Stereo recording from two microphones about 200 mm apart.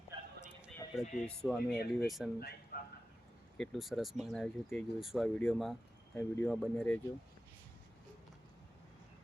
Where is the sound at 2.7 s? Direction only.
50° left (ahead or behind).